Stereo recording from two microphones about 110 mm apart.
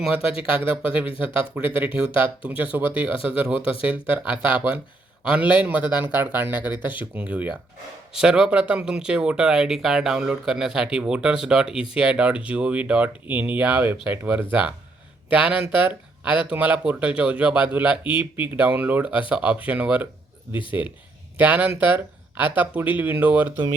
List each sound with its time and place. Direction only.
0.6 s speech: 15° right (ahead or behind)
18.0 s speech: 50° left (ahead or behind)
18.3 s speech: 15° right (ahead or behind)